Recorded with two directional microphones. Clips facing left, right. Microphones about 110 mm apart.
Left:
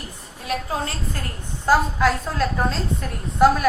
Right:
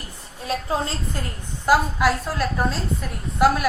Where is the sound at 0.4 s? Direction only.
25° right (ahead or behind).